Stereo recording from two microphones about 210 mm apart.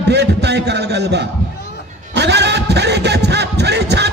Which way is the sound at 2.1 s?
55° right (ahead or behind).